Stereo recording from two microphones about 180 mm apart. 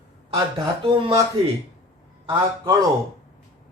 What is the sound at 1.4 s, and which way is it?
Speech, 30° right (ahead or behind).